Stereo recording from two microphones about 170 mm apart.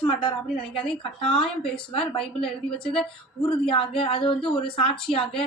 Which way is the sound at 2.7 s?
30° left (ahead or behind).